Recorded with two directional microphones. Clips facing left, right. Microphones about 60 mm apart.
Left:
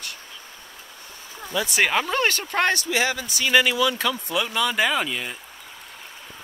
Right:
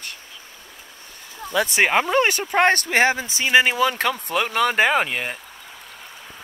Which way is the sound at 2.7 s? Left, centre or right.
Right.